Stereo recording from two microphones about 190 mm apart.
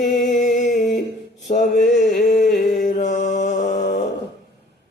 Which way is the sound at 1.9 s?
40° left (ahead or behind).